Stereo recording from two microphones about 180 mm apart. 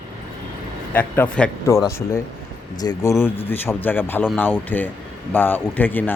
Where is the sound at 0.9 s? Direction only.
10° left (ahead or behind).